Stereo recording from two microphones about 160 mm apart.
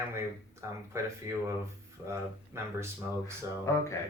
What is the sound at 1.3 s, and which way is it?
Speech, 15° right (ahead or behind).